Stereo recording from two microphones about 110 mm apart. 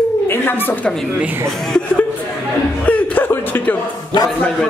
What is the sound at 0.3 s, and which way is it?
Speech, 20° left (ahead or behind).